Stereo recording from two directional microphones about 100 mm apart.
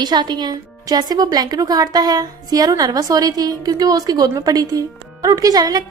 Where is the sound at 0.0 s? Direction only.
45° right (ahead or behind).